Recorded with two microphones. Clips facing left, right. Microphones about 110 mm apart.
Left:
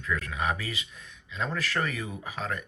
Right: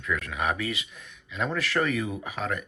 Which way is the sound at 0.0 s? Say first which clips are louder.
Right 1 dB; 30° left (ahead or behind).